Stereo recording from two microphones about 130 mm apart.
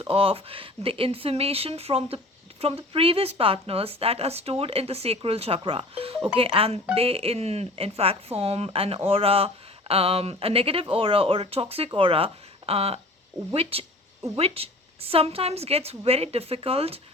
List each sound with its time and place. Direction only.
0.0 s speech: 45° right (ahead or behind)